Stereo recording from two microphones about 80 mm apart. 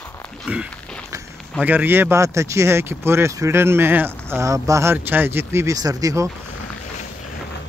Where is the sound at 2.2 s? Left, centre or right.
Right.